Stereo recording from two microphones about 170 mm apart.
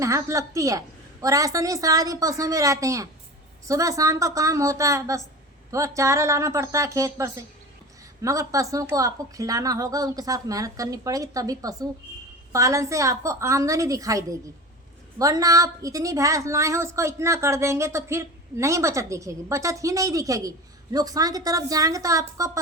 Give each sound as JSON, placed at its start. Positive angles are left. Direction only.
{"t": 0.0, "sound": "a woman's voice", "side_deg": -20}